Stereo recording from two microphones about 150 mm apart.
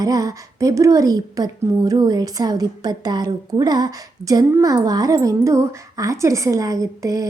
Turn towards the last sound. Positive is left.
turn(degrees=-20)  # may be behind; listen again after turning